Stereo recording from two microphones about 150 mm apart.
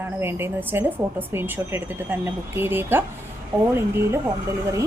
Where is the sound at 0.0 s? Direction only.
15° right (ahead or behind).